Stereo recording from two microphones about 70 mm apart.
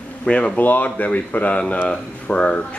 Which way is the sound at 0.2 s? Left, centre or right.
Centre.